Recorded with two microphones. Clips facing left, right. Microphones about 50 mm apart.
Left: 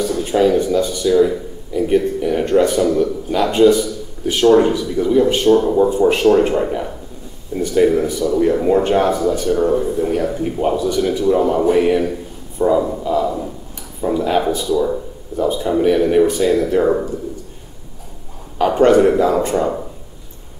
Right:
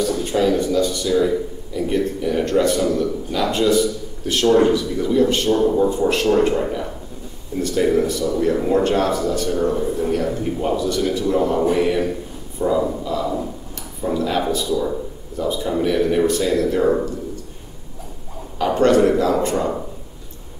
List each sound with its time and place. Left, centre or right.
0.0 s speech: centre
1.0 s speech: centre
1.7 s speech: left
12.5 s a sound: centre
14.0 s speech: centre
18.6 s speech: centre